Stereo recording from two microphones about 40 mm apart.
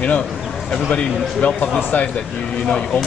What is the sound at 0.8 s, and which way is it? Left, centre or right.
Speech, left.